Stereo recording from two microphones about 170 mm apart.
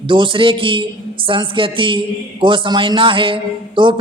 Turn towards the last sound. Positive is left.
turn(degrees=-30)  # may be behind; listen again after turning